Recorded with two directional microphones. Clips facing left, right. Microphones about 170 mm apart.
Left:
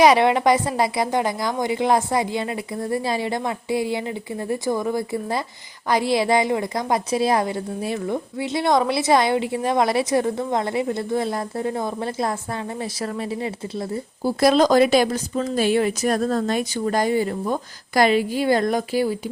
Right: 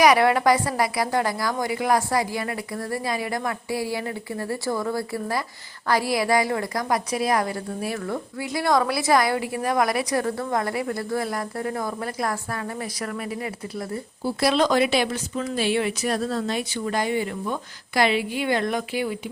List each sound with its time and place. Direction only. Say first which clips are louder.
0.0 s a woman's voice: left 2 dB; 25° left (ahead or behind)
14.3 s speech: left 5 dB; 40° left (ahead or behind)